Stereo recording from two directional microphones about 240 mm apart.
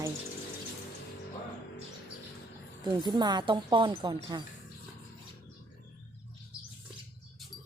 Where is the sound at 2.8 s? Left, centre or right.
Centre.